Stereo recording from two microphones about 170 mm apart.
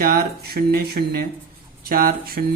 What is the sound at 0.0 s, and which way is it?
Speech, 65° right (ahead or behind).